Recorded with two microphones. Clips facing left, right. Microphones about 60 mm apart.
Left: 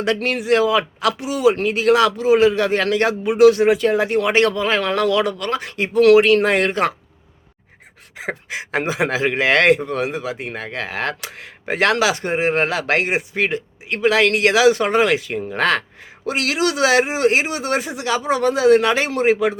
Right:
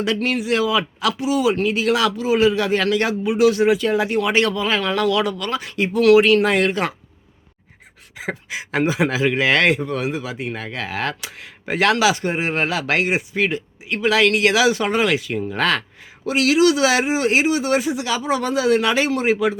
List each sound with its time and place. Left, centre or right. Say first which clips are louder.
0.0 s speech: left 1 dB; left
8.4 s speech: right 2 dB; left